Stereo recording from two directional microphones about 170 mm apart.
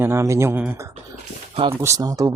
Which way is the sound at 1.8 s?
15° right (ahead or behind).